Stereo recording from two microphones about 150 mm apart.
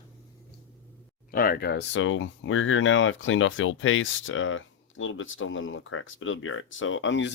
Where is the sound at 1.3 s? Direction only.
80° left.